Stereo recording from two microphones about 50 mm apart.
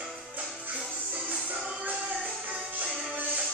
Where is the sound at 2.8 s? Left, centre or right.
Right.